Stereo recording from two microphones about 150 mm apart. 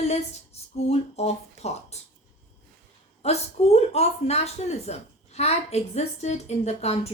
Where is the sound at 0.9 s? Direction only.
45° left (ahead or behind).